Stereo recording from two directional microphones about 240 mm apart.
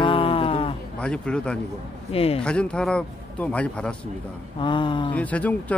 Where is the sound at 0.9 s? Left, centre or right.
Centre.